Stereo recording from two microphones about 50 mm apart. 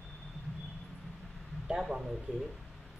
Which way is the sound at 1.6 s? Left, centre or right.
Centre.